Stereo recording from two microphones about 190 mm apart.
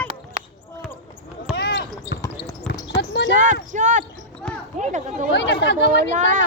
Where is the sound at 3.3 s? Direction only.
40° right (ahead or behind).